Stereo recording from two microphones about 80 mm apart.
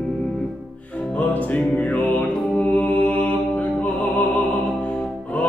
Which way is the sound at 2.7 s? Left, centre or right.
Left.